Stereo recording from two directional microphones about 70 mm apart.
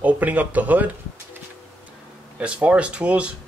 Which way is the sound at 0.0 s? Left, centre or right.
Right.